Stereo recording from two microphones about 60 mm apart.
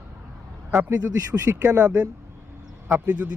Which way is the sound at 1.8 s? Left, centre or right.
Right.